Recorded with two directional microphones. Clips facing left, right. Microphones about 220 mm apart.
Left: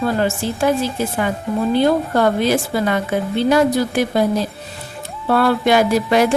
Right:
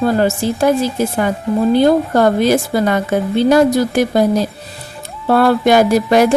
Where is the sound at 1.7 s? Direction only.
45° right (ahead or behind).